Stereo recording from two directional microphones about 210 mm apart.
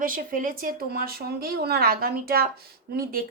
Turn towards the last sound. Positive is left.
turn(degrees=-45)  # may be behind; listen again after turning